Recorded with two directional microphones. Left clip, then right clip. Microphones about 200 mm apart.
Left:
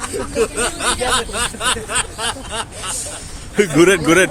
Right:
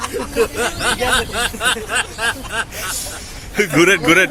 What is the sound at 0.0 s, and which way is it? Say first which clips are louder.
Speech: right 1 dB; 60° left (ahead or behind).